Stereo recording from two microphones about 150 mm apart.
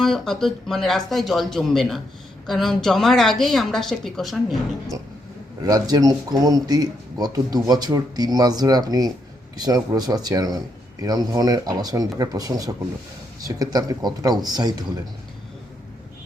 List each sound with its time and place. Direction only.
0.0 s a woman's voice: 5° left (ahead or behind)
5.6 s speech: 25° right (ahead or behind)